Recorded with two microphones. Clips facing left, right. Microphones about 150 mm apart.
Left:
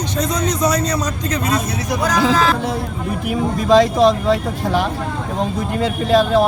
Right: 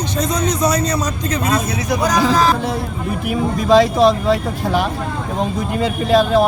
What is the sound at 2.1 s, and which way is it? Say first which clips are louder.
Speech: even; 40° right (ahead or behind).